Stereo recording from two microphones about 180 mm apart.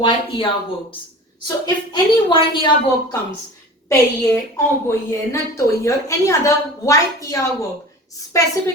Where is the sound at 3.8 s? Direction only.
15° left (ahead or behind).